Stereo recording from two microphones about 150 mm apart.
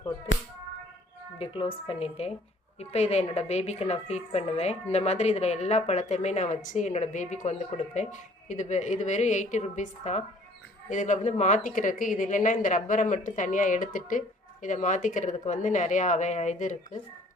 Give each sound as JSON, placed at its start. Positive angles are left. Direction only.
{"t": 1.4, "sound": "a woman's voice", "side_deg": 35}